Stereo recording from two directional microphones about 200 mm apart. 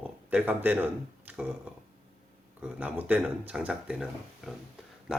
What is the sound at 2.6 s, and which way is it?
Speech, 5° right (ahead or behind).